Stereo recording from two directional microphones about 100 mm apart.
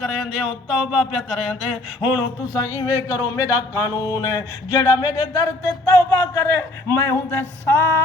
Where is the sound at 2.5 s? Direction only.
35° left (ahead or behind).